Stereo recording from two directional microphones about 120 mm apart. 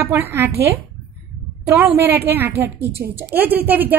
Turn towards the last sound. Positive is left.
turn(degrees=-15)  # may be behind; listen again after turning